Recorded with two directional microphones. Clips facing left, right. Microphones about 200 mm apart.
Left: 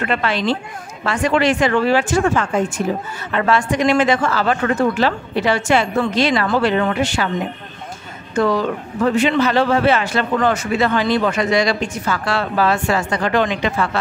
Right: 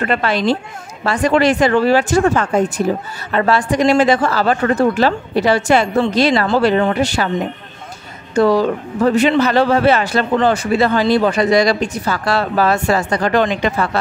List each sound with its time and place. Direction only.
0.0 s a man's voice: 40° right (ahead or behind)
8.4 s a man's voice: 35° right (ahead or behind)